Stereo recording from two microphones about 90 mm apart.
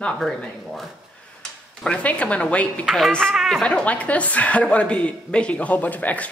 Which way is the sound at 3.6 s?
15° left (ahead or behind).